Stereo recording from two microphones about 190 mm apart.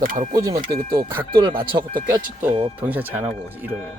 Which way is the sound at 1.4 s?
25° right (ahead or behind).